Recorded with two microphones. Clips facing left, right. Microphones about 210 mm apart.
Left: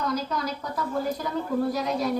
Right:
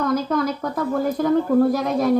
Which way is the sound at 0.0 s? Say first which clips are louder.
Right 8 dB; 50° right (ahead or behind).